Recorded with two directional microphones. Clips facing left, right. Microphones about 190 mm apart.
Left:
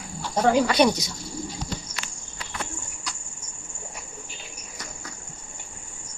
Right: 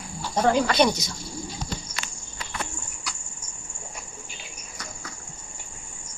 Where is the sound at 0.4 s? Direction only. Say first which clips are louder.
Left 1 dB; 10° left (ahead or behind).